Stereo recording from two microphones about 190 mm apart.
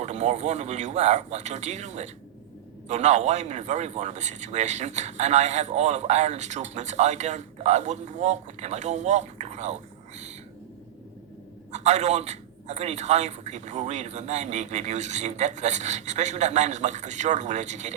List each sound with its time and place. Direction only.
0.0 s speech: 35° right (ahead or behind)
11.7 s speech: 35° right (ahead or behind)